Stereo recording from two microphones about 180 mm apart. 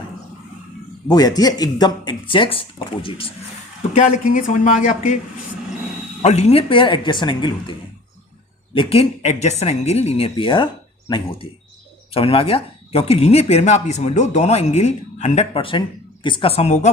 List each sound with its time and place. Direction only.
1.0 s speech: 20° left (ahead or behind)
3.9 s speech: 45° left (ahead or behind)
6.2 s speech: 35° left (ahead or behind)